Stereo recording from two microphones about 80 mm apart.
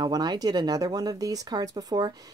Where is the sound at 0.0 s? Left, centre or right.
Right.